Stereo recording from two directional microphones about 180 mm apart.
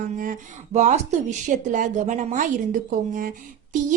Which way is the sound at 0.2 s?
45° right (ahead or behind).